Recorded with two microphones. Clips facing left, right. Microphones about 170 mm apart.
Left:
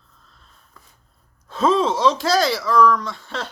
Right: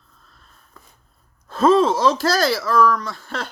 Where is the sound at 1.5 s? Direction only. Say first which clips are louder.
Right 3 dB; centre (ahead or behind).